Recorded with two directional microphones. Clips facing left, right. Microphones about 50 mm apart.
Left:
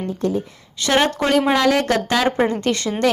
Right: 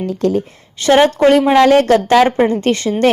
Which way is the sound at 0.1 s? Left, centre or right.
Right.